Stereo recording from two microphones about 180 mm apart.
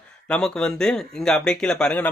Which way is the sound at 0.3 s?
5° left (ahead or behind).